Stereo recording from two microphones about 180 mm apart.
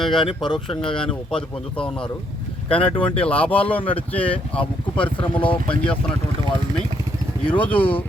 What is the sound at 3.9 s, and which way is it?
Speech, 30° left (ahead or behind).